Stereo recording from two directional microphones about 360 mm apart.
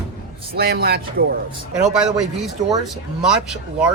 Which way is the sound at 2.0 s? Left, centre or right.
Centre.